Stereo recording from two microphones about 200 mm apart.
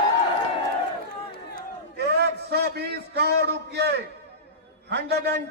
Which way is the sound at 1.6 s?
55° right (ahead or behind).